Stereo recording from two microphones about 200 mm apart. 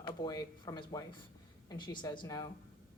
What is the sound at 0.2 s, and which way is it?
A woman's voice, 20° left (ahead or behind).